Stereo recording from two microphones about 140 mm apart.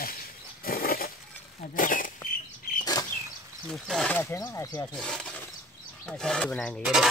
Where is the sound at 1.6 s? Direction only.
75° left (ahead or behind).